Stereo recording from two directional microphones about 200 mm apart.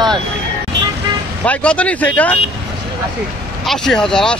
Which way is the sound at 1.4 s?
5° left (ahead or behind).